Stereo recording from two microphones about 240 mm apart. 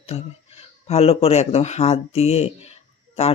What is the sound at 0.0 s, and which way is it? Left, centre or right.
Speech, left.